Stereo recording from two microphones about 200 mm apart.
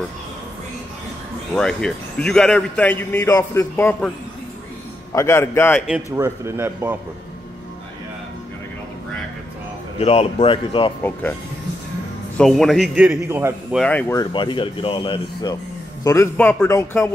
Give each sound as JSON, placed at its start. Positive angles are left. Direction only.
{"t": 1.5, "sound": "speech", "side_deg": 5}
{"t": 5.1, "sound": "speech", "side_deg": 15}
{"t": 6.1, "sound": "speech", "side_deg": -15}
{"t": 9.9, "sound": "speech", "side_deg": 30}
{"t": 12.4, "sound": "a man's voice", "side_deg": 0}
{"t": 13.7, "sound": "speech", "side_deg": 5}
{"t": 14.3, "sound": "speech", "side_deg": 25}